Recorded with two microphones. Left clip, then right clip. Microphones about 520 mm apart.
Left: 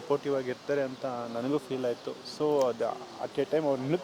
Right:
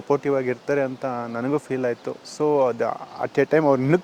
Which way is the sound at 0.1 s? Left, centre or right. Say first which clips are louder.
Right 8 dB; right.